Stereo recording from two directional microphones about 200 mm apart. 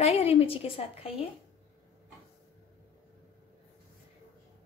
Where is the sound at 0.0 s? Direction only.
30° left (ahead or behind).